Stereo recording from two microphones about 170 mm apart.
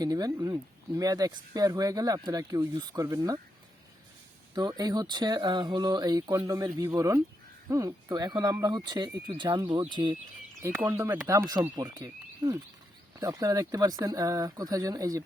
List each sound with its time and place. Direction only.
0.0 s speech: 20° right (ahead or behind)
4.5 s speech: 25° right (ahead or behind)
10.8 s speech: 15° right (ahead or behind)